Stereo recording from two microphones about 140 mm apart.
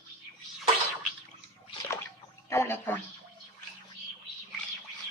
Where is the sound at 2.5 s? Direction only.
15° left (ahead or behind).